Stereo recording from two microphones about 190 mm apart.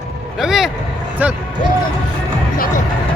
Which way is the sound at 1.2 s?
5° right (ahead or behind).